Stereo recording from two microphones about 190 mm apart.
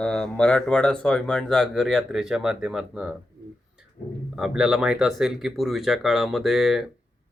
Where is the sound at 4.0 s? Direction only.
45° left (ahead or behind).